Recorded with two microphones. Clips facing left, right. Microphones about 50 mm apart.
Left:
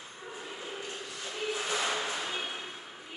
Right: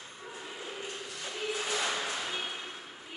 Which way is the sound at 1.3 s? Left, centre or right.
Centre.